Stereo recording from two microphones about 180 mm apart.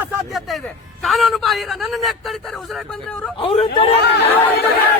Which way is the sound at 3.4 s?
30° left (ahead or behind).